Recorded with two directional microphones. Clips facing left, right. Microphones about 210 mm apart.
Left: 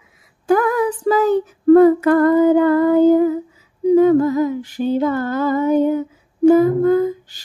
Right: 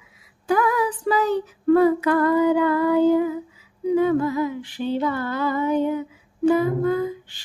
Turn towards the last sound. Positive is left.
turn(degrees=40)  # may be behind; listen again after turning